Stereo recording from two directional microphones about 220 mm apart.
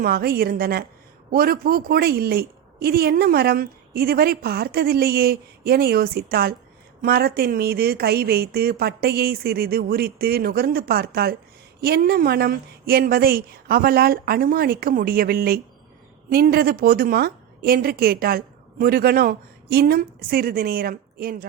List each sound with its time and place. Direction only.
0.0 s a woman's voice: 45° right (ahead or behind)